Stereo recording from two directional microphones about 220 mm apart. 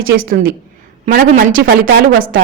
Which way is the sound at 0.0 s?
40° right (ahead or behind).